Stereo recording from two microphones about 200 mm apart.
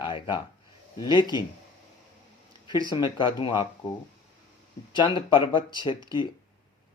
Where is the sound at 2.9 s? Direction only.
20° left (ahead or behind).